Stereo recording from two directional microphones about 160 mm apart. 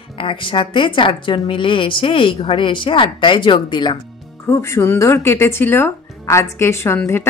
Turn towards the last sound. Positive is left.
turn(degrees=15)  # may be behind; listen again after turning